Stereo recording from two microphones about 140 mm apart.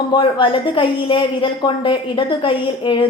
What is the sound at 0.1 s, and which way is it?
A woman's voice, 35° left (ahead or behind).